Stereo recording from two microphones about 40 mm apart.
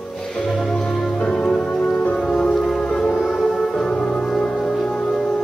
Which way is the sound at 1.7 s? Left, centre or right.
Left.